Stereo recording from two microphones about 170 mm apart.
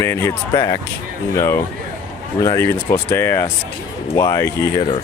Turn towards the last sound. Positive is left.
turn(degrees=20)  # may be behind; listen again after turning